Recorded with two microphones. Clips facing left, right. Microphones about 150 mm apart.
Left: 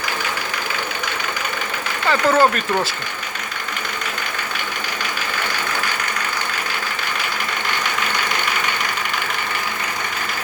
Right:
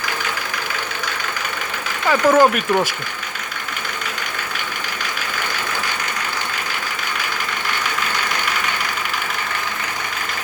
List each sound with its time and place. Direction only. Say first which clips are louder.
2.0 s speech: right 2 dB; 10° right (ahead or behind)